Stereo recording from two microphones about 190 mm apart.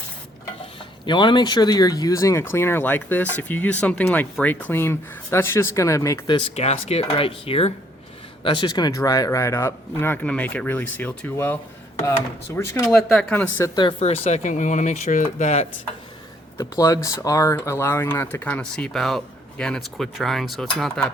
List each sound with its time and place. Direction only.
1.0 s speech: 25° left (ahead or behind)
13.0 s speech: 5° left (ahead or behind)
13.7 s speech: 30° left (ahead or behind)
16.6 s speech: 15° left (ahead or behind); by 21.0 s centre (ahead or behind)